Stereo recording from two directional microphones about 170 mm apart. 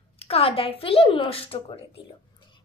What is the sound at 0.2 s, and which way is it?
A child's voice, 35° left (ahead or behind).